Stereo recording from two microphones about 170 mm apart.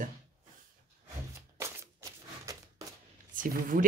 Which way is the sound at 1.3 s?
15° right (ahead or behind).